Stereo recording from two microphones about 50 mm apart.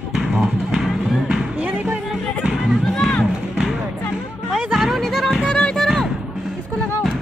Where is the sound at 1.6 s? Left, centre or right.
Right.